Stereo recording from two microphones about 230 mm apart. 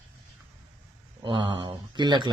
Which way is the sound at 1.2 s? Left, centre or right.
Right.